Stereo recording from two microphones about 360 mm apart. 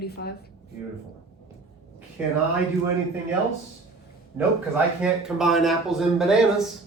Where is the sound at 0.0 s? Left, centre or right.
Left.